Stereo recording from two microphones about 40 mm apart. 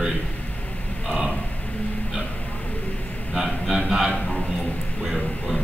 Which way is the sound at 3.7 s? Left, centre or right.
Centre.